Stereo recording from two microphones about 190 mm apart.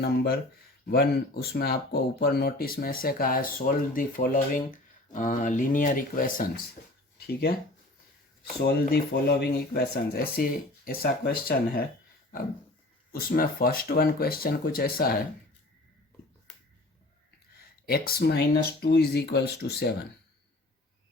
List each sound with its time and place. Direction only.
0.0 s speech: 55° left (ahead or behind)
8.6 s speech: 55° left (ahead or behind)
13.1 s speech: 50° left (ahead or behind)
17.6 s speech: 55° left (ahead or behind)